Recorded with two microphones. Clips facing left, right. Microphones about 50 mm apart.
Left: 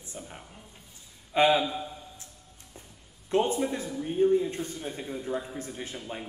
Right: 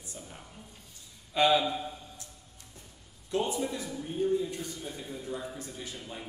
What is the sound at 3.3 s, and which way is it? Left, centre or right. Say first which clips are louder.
Speech: left 5 dB; left.